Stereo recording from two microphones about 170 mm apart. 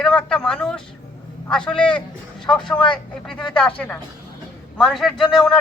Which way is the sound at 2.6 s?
30° left (ahead or behind).